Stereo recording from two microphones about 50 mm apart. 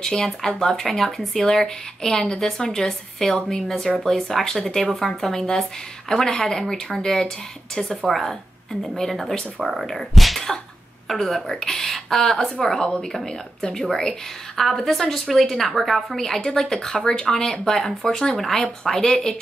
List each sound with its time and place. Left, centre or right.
0.0 s speech: centre
5.3 s a woman's voice: centre
16.9 s speech: centre